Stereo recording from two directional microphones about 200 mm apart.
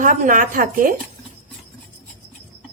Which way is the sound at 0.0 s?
40° right (ahead or behind).